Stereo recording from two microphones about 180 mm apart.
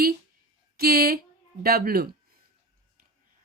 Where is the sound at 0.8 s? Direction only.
60° right (ahead or behind).